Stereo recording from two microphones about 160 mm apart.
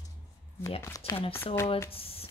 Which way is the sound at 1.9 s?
35° left (ahead or behind).